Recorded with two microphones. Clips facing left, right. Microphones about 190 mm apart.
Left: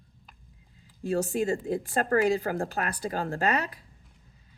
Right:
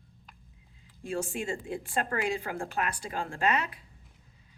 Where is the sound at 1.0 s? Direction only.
40° left (ahead or behind).